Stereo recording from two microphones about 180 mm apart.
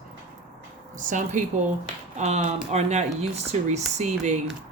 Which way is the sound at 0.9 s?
45° right (ahead or behind).